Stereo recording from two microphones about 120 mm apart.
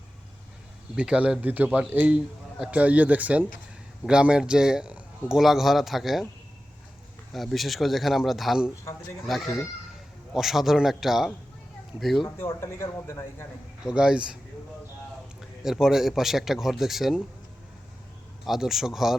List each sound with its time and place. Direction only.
0.9 s a man's voice: 10° right (ahead or behind)
7.3 s a man's voice: centre (ahead or behind)
12.4 s speech: 20° left (ahead or behind)
13.8 s a man's voice: 5° right (ahead or behind)
15.4 s a man's voice: 5° right (ahead or behind)
18.4 s a man's voice: centre (ahead or behind)